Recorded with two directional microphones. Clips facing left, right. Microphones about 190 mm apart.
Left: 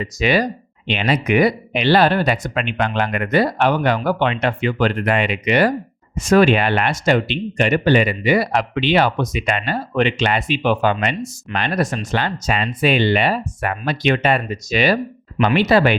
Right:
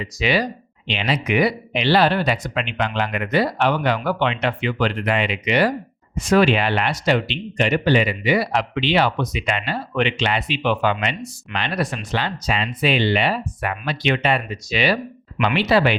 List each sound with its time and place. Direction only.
0.0 s speech: 50° left (ahead or behind)